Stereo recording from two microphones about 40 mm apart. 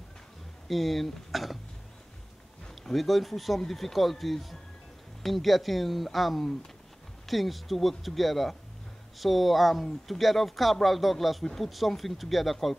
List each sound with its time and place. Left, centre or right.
0.7 s speech: centre
2.8 s speech: centre